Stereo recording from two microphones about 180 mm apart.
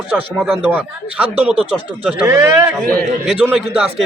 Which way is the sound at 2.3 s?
20° right (ahead or behind).